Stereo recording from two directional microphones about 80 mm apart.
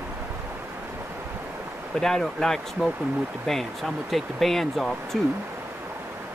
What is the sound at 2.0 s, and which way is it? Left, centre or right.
Speech, centre.